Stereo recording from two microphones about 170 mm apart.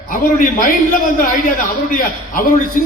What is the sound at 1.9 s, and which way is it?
Speech, 55° left (ahead or behind).